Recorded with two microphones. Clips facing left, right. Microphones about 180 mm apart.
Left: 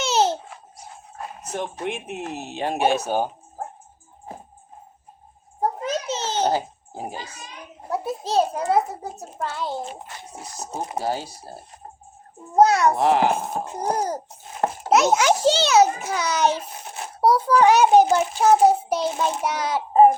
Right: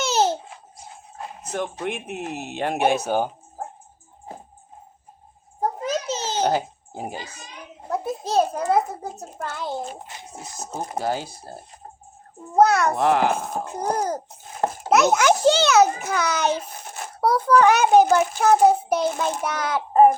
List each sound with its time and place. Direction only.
1.8 s speech: 55° right (ahead or behind)
5.8 s a sound: 40° right (ahead or behind); by 7.0 s 55° right (ahead or behind)
7.9 s a child's voice: 50° right (ahead or behind)
12.5 s a child's voice: 55° right (ahead or behind)